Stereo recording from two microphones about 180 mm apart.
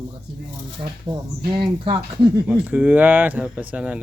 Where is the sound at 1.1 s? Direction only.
20° right (ahead or behind).